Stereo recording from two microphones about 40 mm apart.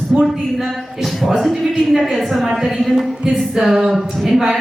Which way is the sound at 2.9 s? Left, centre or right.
Centre.